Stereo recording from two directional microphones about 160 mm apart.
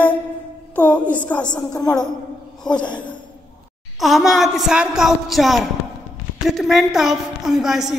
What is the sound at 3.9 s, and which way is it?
A woman's voice, centre (ahead or behind).